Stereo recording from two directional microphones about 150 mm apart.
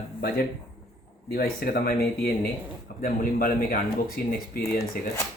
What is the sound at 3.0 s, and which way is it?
Speech, 75° left (ahead or behind).